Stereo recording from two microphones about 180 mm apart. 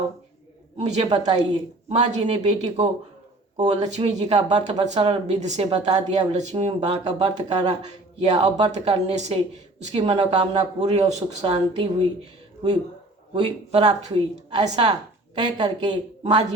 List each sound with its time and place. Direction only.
0.8 s speech: 35° right (ahead or behind)
13.3 s a woman's voice: 35° right (ahead or behind)
16.2 s a woman's voice: 40° right (ahead or behind)